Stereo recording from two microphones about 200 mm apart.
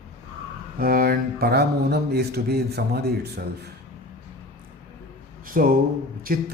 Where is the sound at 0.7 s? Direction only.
45° right (ahead or behind).